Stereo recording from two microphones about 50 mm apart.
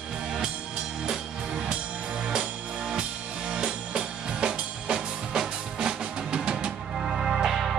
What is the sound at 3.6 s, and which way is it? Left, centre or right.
Music, centre.